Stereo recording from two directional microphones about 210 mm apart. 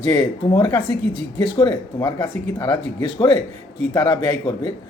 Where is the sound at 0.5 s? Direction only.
20° left (ahead or behind).